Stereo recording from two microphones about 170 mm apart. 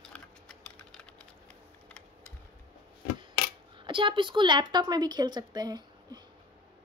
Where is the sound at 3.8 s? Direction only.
30° right (ahead or behind).